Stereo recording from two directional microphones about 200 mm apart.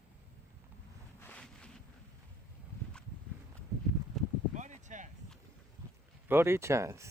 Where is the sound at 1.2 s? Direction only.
5° left (ahead or behind).